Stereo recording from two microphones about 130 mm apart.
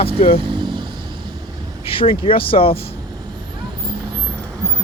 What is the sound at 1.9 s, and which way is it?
Speech, 45° left (ahead or behind).